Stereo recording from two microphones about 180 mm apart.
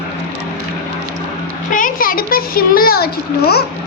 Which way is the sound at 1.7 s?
50° left (ahead or behind).